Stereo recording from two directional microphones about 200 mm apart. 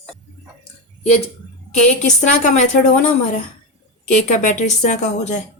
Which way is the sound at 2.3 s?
40° left (ahead or behind).